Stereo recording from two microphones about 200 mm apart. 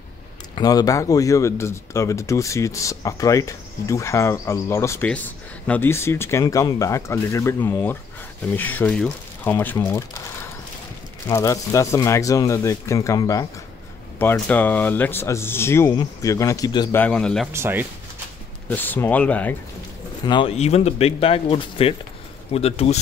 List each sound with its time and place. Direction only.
0.6 s speech: 20° left (ahead or behind)
17.0 s a man's voice: 5° left (ahead or behind)
17.5 s speech: 10° right (ahead or behind)
18.7 s speech: 10° left (ahead or behind)
20.2 s speech: 25° left (ahead or behind)